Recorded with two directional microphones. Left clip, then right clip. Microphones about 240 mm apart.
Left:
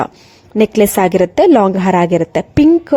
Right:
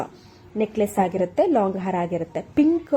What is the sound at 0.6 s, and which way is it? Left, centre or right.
A woman's voice, left.